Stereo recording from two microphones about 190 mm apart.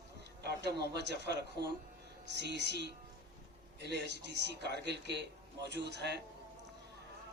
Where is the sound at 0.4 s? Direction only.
60° right (ahead or behind).